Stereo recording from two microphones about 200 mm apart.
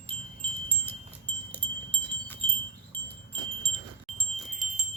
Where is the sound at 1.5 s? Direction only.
10° left (ahead or behind).